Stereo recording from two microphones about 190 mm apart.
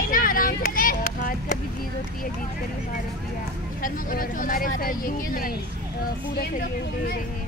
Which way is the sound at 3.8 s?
45° left (ahead or behind).